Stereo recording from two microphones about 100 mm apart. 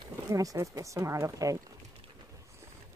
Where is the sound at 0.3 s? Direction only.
35° right (ahead or behind).